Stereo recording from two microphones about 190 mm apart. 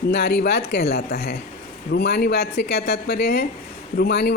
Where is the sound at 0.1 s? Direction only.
65° left (ahead or behind).